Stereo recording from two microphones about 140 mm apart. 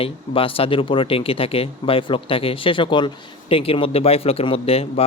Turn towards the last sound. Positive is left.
turn(degrees=45)  # may be behind; listen again after turning